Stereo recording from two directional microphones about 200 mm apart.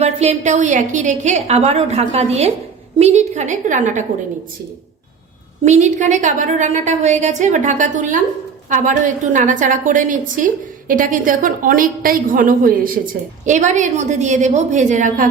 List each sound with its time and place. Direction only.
0.0 s a woman's voice: 35° right (ahead or behind)
5.6 s a woman's voice: 35° right (ahead or behind)